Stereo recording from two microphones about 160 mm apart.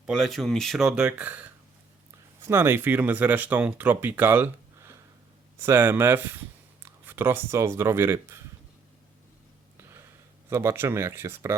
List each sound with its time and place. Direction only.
0.0 s speech: centre (ahead or behind)
10.5 s speech: 15° right (ahead or behind)